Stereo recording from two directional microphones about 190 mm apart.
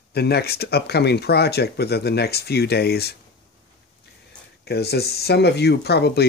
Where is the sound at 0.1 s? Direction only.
60° left (ahead or behind).